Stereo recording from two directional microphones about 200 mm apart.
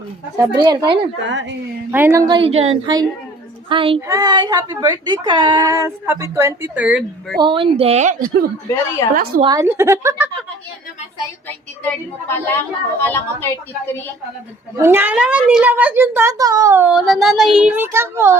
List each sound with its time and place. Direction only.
0.3 s a woman's voice: 15° right (ahead or behind)
1.3 s speech: 65° right (ahead or behind)
1.9 s a woman's voice: 10° right (ahead or behind)
7.4 s a woman's voice: 25° right (ahead or behind); by 8.4 s 40° right (ahead or behind)
9.4 s a woman's voice: 15° right (ahead or behind)
11.4 s a woman's voice: 10° left (ahead or behind)
14.8 s a woman's voice: 10° right (ahead or behind)